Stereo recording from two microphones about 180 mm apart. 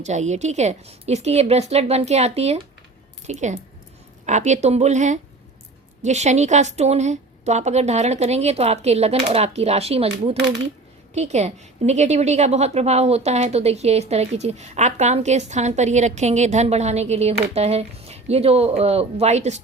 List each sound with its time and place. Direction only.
0.0 s a woman's voice: 40° right (ahead or behind)